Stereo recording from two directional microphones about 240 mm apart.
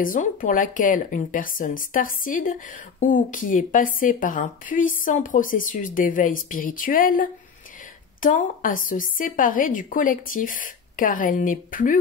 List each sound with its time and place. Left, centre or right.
0.0 s speech: left